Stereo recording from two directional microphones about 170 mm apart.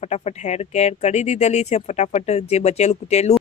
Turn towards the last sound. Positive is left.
turn(degrees=40)  # may be behind; listen again after turning